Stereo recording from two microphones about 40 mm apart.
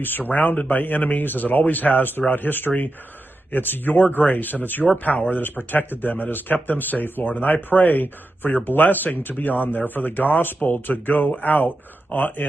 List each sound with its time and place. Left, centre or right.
0.0 s a man's voice: left
4.0 s a man's voice: left